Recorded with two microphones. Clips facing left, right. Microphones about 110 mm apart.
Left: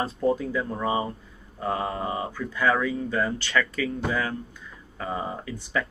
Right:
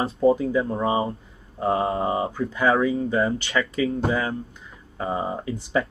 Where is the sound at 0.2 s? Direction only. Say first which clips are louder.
Right 7 dB; 15° right (ahead or behind).